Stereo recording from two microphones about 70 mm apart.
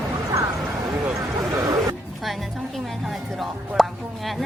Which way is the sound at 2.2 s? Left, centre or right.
Centre.